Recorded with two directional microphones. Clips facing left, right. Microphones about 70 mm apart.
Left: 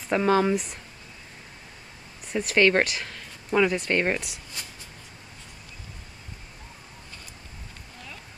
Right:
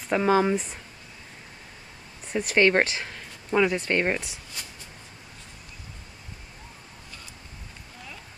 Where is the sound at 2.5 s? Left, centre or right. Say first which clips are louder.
Even; centre.